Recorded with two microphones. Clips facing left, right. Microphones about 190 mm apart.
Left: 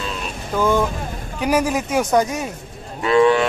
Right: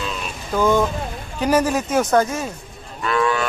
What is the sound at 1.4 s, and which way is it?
Speech, 10° left (ahead or behind).